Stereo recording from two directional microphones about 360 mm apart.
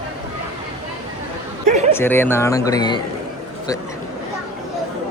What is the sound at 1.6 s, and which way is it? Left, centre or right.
Speech, centre.